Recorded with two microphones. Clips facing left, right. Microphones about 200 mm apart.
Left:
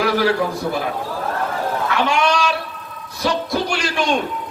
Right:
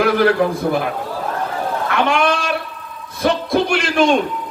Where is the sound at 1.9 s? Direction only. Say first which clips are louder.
Right 2 dB; 55° right (ahead or behind).